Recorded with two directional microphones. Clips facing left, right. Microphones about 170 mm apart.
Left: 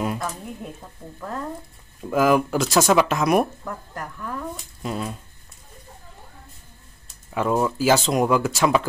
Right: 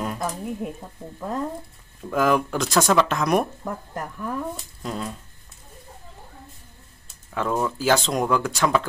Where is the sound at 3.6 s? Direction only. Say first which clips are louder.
Right 2 dB; 20° right (ahead or behind).